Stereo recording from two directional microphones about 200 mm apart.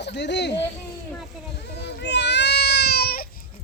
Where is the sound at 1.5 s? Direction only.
55° left (ahead or behind).